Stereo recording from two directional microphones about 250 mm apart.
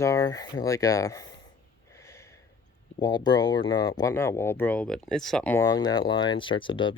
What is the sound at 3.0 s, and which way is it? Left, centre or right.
Speech, centre.